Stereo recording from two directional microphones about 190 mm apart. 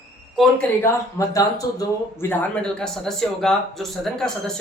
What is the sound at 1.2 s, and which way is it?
Speech, 15° left (ahead or behind).